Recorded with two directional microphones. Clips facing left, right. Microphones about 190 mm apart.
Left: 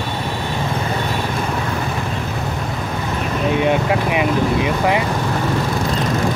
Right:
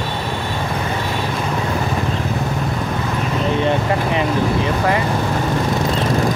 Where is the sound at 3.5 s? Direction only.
10° left (ahead or behind).